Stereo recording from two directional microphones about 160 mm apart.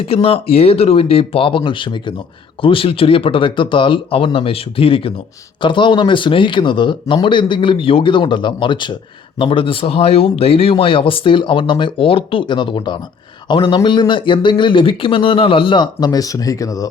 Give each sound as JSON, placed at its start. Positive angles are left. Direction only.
{"t": 0.1, "sound": "a man's voice", "side_deg": 35}